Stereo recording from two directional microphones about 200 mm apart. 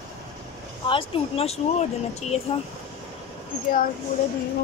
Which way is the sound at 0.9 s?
30° left (ahead or behind).